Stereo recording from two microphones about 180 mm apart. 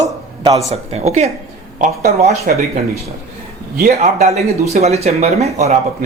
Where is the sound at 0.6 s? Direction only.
35° right (ahead or behind).